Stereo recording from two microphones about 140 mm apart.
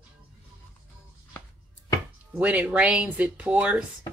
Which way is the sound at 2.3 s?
10° right (ahead or behind).